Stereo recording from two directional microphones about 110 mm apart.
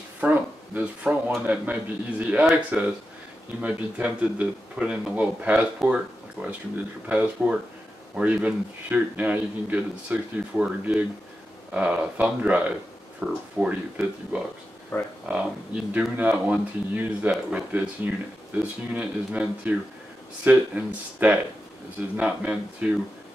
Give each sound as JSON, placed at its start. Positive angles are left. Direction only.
{"t": 0.2, "sound": "a sound", "side_deg": -15}
{"t": 1.3, "sound": "speech", "side_deg": -10}
{"t": 11.7, "sound": "speech", "side_deg": -10}
{"t": 14.9, "sound": "speech", "side_deg": 20}
{"t": 15.2, "sound": "speech", "side_deg": -10}